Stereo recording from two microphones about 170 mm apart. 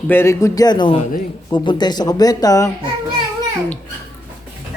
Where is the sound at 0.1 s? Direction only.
15° left (ahead or behind).